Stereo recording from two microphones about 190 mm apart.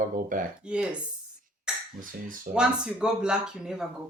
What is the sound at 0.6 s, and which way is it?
Speech, 5° right (ahead or behind).